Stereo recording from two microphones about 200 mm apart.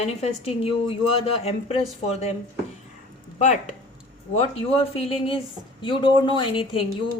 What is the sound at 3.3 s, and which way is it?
Speech, 35° left (ahead or behind).